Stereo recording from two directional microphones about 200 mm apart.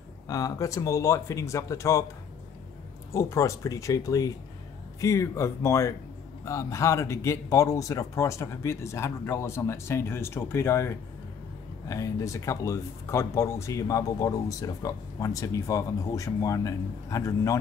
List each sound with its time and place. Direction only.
0.3 s speech: 15° left (ahead or behind)
3.1 s speech: 15° left (ahead or behind)